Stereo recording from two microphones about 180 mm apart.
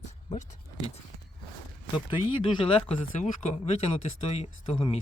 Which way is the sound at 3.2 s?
35° left (ahead or behind).